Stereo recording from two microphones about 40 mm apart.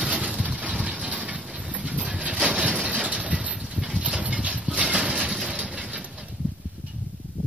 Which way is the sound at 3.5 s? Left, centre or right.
Right.